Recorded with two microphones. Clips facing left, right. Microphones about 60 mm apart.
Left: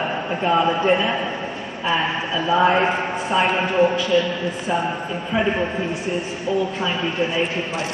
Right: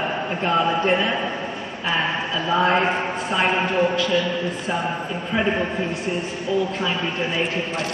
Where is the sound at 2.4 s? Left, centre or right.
Centre.